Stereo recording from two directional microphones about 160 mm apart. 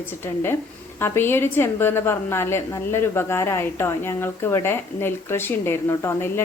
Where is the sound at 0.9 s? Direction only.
15° left (ahead or behind).